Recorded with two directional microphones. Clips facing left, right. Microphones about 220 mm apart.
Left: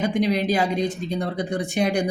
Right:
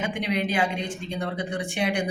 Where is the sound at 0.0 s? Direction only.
35° left (ahead or behind).